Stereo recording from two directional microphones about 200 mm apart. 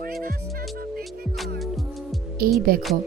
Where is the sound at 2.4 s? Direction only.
50° right (ahead or behind).